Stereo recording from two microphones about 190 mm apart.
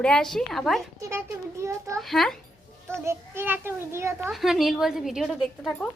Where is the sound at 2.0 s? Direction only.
Centre (ahead or behind).